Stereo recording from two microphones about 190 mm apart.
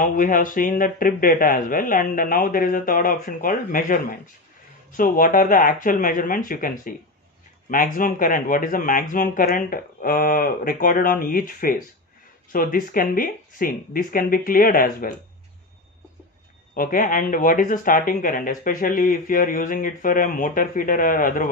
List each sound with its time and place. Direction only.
0.0 s speech: 45° left (ahead or behind)
16.7 s speech: 45° left (ahead or behind)